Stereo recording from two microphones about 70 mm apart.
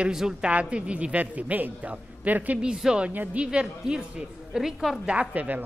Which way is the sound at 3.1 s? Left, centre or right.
Right.